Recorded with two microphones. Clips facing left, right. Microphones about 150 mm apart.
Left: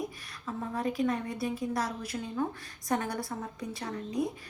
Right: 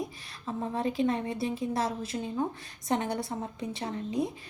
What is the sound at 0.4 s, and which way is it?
A woman's voice, 25° right (ahead or behind).